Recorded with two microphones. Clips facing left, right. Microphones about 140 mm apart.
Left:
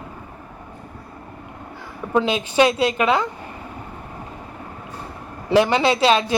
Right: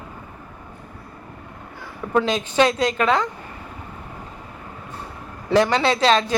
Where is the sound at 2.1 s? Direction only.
10° left (ahead or behind).